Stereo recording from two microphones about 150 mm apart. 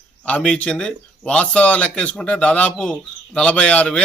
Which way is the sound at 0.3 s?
5° left (ahead or behind).